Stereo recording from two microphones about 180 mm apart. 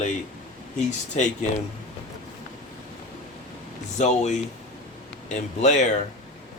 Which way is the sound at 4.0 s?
40° left (ahead or behind).